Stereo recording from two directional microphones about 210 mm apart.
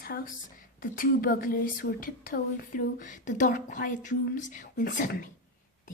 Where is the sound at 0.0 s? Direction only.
45° left (ahead or behind).